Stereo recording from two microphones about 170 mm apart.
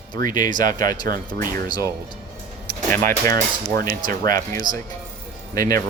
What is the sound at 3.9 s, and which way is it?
Speech, 55° right (ahead or behind).